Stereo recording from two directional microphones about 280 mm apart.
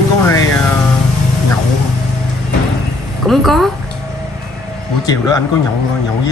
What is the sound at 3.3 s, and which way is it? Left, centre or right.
Speech, centre.